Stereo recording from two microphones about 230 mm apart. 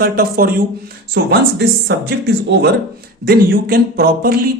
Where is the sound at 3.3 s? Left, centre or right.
Right.